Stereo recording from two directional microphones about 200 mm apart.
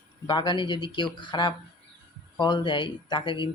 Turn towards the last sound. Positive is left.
turn(degrees=25)  # may be behind; listen again after turning